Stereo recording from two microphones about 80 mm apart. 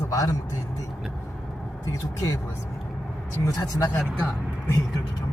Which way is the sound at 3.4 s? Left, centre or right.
Left.